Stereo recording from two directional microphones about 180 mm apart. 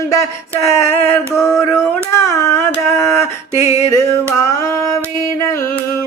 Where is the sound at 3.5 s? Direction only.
15° right (ahead or behind).